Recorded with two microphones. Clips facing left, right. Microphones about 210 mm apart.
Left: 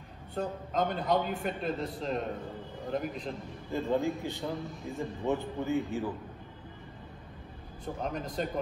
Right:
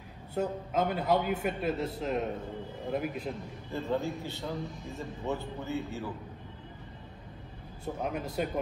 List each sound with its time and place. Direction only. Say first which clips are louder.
0.3 s a man's voice: right 3 dB; 5° right (ahead or behind)
3.7 s speech: left 3 dB; 15° left (ahead or behind)
7.8 s a man's voice: right 1 dB; 5° right (ahead or behind)